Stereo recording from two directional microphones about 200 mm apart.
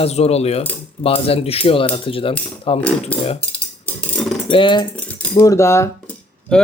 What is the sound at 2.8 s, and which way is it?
Speech, 5° left (ahead or behind).